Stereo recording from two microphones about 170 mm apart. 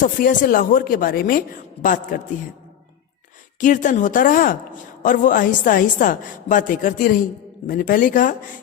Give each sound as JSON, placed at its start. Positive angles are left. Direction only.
{"t": 0.0, "sound": "a woman's voice", "side_deg": 55}
{"t": 3.6, "sound": "a woman's voice", "side_deg": 50}